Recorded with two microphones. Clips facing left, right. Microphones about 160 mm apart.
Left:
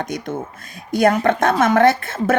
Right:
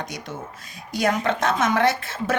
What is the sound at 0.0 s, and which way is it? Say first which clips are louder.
A woman's voice: left 8 dB; 50° left (ahead or behind).